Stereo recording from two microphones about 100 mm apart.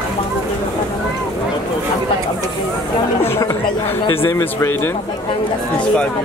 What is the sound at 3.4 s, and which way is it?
Speech, 25° left (ahead or behind).